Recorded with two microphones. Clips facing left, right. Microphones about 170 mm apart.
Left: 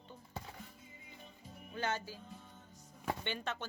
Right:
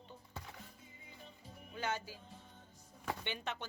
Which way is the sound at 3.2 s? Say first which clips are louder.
Left 2 dB; 15° right (ahead or behind).